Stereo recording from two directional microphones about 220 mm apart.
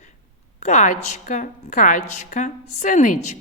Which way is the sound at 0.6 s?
35° left (ahead or behind).